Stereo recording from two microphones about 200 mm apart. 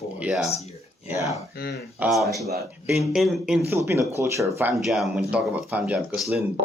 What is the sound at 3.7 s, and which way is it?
Speech, 15° right (ahead or behind).